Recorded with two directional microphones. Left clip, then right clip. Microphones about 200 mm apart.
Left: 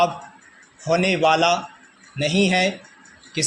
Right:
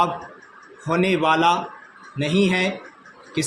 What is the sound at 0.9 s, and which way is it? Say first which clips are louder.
A man's voice: left 1 dB; 20° left (ahead or behind).